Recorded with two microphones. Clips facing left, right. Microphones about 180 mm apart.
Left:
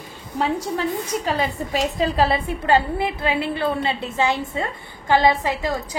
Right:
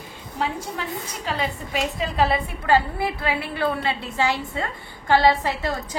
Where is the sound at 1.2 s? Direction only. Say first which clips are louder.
Left 4 dB; 35° left (ahead or behind).